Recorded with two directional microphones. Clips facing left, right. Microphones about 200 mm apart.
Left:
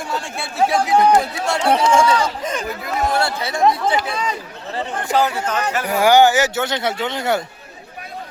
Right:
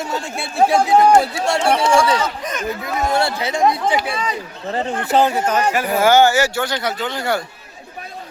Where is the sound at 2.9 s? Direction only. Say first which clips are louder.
Even; 20° right (ahead or behind).